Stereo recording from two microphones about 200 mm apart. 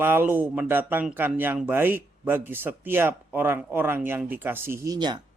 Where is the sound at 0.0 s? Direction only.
10° right (ahead or behind).